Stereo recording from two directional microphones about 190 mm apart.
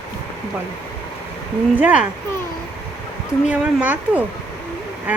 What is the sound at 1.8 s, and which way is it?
Speech, 5° right (ahead or behind).